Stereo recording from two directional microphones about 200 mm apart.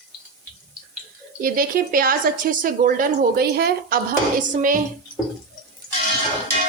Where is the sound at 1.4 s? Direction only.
45° right (ahead or behind).